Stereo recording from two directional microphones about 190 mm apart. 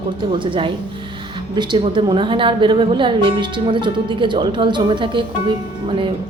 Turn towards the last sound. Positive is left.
turn(degrees=-25)  # may be behind; listen again after turning